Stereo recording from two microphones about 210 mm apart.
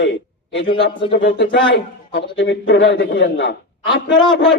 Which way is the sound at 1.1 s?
55° left (ahead or behind).